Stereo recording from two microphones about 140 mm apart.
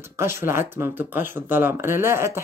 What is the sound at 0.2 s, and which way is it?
Speech, 20° right (ahead or behind).